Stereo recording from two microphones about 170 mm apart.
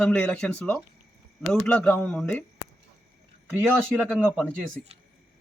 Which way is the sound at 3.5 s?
10° right (ahead or behind).